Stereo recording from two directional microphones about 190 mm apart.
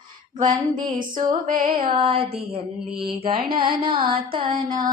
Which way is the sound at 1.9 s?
30° right (ahead or behind).